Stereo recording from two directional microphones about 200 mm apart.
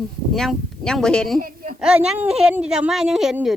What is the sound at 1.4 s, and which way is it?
Speech, 45° right (ahead or behind).